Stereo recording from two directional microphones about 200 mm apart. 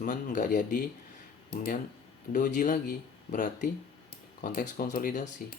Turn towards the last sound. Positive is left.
turn(degrees=45)  # may be behind; listen again after turning